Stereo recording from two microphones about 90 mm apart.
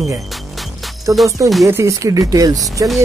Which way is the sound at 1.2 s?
40° right (ahead or behind).